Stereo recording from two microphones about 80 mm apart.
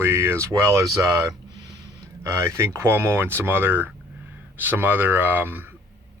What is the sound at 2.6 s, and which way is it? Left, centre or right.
Speech, right.